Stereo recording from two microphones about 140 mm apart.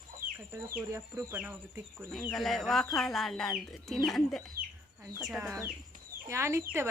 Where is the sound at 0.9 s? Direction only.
20° right (ahead or behind).